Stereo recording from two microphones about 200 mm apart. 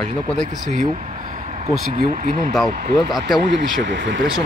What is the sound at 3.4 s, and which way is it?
Speech, 60° right (ahead or behind).